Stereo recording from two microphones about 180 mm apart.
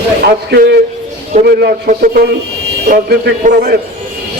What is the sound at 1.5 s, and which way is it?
A man's voice, 55° right (ahead or behind).